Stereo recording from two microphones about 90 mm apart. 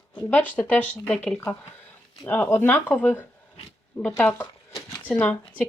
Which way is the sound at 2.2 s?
20° left (ahead or behind).